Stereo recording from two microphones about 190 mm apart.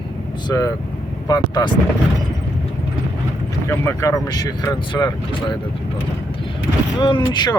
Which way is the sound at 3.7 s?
15° left (ahead or behind).